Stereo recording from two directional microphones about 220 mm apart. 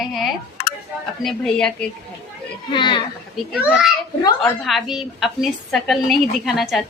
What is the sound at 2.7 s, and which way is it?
Speech, 20° left (ahead or behind).